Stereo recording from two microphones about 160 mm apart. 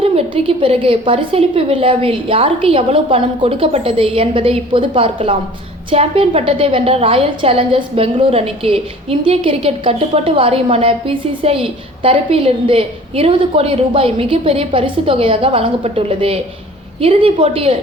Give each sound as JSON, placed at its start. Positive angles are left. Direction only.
{"t": 0.0, "sound": "a woman's voice", "side_deg": -40}